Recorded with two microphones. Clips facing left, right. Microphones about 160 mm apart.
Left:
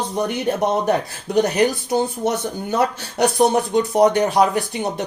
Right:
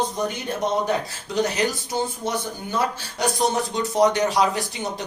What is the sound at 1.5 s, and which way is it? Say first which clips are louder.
Speech: left 6 dB; 60° left (ahead or behind).